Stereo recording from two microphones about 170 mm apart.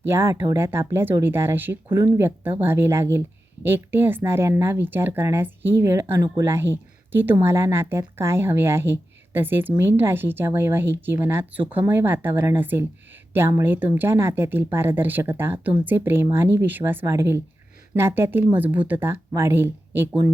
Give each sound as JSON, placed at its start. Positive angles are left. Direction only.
{"t": 0.0, "sound": "speech", "side_deg": -15}